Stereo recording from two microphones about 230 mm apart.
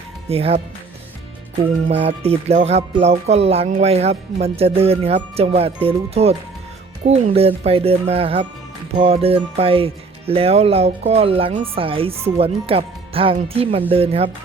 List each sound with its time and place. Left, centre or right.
0.3 s music: right
1.9 s music: right